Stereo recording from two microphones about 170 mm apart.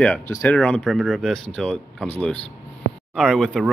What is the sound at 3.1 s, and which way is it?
Speech, centre (ahead or behind).